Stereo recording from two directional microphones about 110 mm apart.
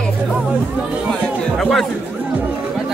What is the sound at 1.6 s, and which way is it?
Speech, 5° left (ahead or behind).